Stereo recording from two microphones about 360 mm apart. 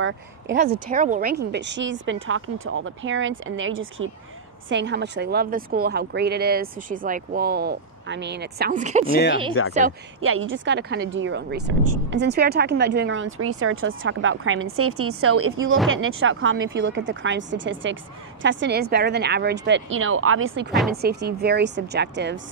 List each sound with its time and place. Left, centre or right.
0.0 s speech: right
0.7 s a woman's voice: right
9.6 s speech: left
10.2 s a woman's voice: right